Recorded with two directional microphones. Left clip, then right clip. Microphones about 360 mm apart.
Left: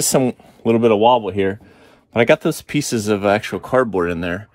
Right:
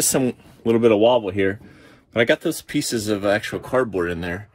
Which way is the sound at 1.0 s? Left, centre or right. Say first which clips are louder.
Left 3 dB; left.